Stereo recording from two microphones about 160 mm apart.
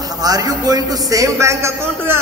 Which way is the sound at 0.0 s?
25° right (ahead or behind).